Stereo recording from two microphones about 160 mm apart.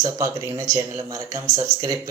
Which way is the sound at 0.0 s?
20° right (ahead or behind).